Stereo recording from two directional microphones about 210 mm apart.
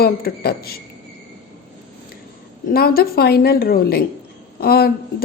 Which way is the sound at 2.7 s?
45° left (ahead or behind).